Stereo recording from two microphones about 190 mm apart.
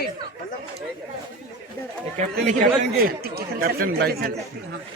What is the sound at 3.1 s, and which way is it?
Speech, 55° right (ahead or behind).